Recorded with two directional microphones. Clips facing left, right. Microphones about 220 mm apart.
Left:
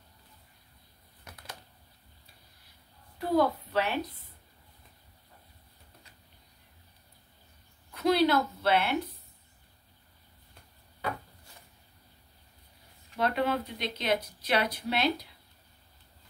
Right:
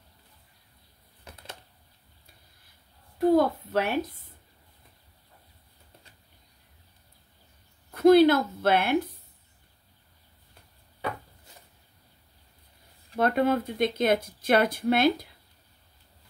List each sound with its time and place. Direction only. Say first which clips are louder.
3.2 s a woman's voice: right 5 dB; 50° right (ahead or behind)
7.9 s a woman's voice: right 8 dB; 50° right (ahead or behind)
13.1 s speech: right 5 dB; 50° right (ahead or behind)